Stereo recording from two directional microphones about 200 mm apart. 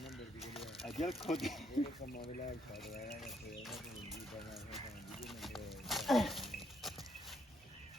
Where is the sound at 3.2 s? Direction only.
Centre (ahead or behind).